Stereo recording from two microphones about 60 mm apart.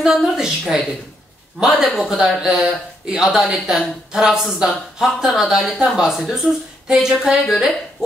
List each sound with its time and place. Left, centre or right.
0.4 s speech: centre